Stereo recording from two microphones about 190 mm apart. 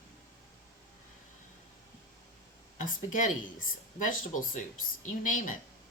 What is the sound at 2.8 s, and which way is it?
Speech, 45° left (ahead or behind).